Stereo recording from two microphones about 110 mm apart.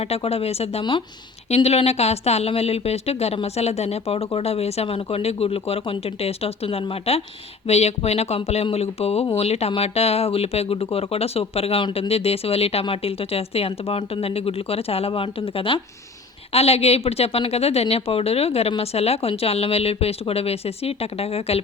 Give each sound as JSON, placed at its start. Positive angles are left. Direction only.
{"t": 0.0, "sound": "speech", "side_deg": 65}
{"t": 7.7, "sound": "speech", "side_deg": 75}
{"t": 16.5, "sound": "speech", "side_deg": 65}